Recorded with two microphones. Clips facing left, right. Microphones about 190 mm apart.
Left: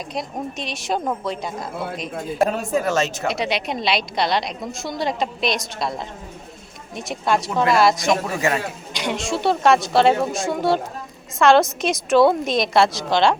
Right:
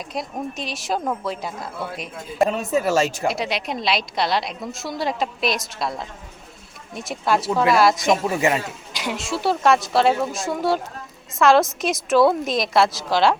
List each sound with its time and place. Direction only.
0.1 s a woman's voice: centre (ahead or behind)
3.2 s a woman's voice: centre (ahead or behind)
8.4 s a man's voice: 20° right (ahead or behind)
8.9 s a woman's voice: 5° right (ahead or behind)